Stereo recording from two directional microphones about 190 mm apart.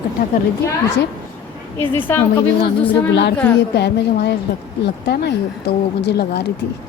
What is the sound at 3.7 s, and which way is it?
Speech, 60° left (ahead or behind).